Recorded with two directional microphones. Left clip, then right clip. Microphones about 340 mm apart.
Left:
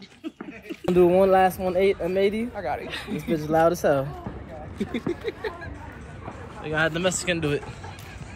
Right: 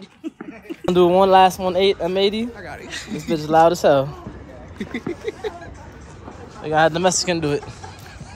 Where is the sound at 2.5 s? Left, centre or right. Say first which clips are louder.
Left 3 dB; centre.